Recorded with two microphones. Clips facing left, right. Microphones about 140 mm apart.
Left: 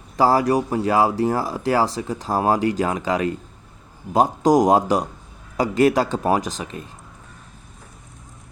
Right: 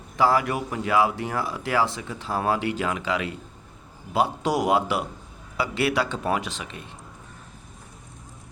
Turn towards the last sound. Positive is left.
turn(degrees=40)  # may be behind; listen again after turning